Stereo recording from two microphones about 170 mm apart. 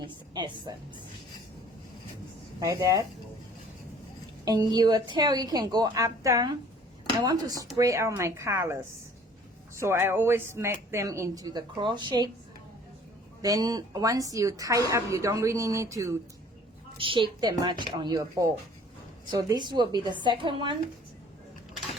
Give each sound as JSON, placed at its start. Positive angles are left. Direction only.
{"t": 0.0, "sound": "a woman's voice", "side_deg": -25}
{"t": 2.6, "sound": "a woman's voice", "side_deg": -20}
{"t": 4.4, "sound": "a woman's voice", "side_deg": -25}
{"t": 9.8, "sound": "speech", "side_deg": -15}
{"t": 13.4, "sound": "a woman's voice", "side_deg": -20}
{"t": 17.0, "sound": "a woman's voice", "side_deg": -30}